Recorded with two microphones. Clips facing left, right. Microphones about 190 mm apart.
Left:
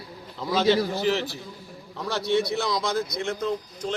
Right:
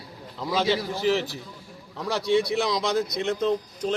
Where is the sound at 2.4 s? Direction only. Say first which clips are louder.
Right 1 dB; 15° right (ahead or behind).